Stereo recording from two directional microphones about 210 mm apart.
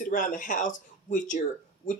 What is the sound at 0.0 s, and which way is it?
Speech, 40° left (ahead or behind).